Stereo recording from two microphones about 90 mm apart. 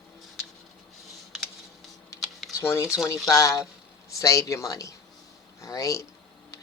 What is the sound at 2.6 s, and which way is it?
Speech, 30° left (ahead or behind).